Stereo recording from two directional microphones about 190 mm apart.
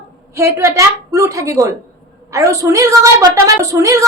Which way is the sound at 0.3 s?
15° right (ahead or behind).